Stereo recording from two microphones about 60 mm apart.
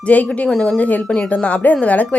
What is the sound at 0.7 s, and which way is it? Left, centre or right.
A woman's voice, left.